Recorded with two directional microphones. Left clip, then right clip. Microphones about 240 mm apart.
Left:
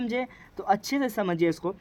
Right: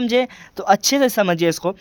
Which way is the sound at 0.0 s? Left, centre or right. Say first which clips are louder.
Right 12 dB; right.